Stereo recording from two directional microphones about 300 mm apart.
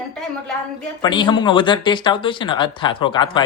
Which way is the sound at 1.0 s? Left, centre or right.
Centre.